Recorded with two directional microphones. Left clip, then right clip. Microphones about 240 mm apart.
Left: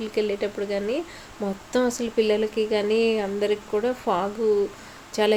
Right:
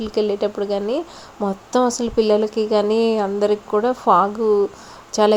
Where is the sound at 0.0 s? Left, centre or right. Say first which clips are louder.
Right 5 dB; right.